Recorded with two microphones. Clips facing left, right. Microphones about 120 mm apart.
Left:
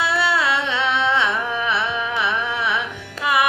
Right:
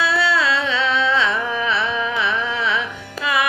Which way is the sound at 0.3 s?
20° left (ahead or behind).